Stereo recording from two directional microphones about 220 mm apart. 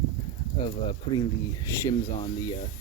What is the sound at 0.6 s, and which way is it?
Speech, 20° left (ahead or behind).